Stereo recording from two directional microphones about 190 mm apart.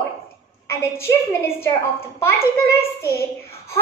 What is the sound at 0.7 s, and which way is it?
A woman's voice, 15° left (ahead or behind).